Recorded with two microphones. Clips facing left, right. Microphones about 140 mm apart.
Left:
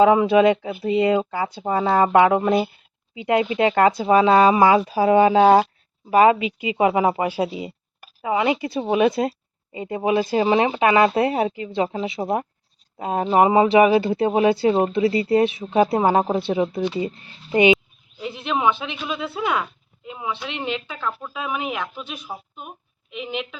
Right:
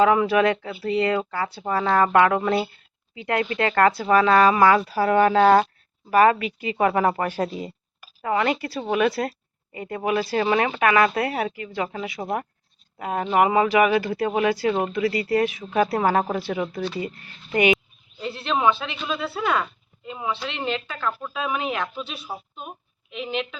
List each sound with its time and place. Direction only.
0.0 s speech: 20° left (ahead or behind)